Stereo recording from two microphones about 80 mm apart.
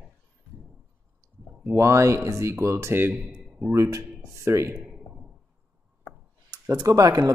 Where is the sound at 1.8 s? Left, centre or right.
Right; by 3.6 s centre.